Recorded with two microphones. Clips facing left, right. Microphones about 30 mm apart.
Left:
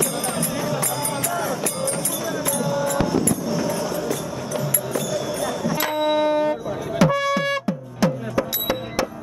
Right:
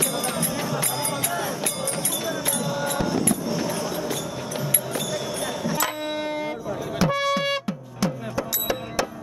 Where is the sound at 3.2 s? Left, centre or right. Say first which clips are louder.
Left 2 dB; right.